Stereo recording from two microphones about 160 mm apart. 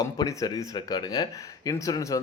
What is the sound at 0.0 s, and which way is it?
Speech, 20° left (ahead or behind).